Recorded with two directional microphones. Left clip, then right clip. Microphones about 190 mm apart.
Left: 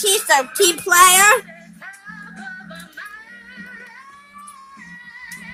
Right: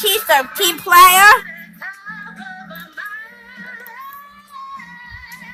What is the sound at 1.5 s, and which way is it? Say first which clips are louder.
Music: right 7 dB; 35° right (ahead or behind).